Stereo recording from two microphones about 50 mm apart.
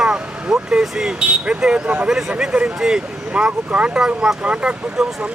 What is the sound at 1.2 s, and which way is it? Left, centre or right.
Speech, right.